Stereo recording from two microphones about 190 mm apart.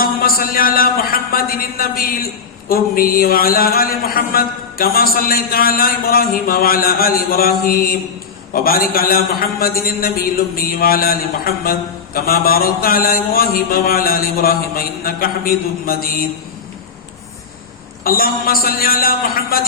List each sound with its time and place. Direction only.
0.0 s a man's voice: 50° left (ahead or behind)
7.6 s mantra: 50° left (ahead or behind)
18.0 s mantra: 50° left (ahead or behind)